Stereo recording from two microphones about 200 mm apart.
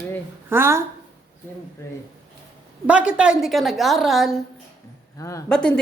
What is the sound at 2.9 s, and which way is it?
A woman's voice, 5° right (ahead or behind).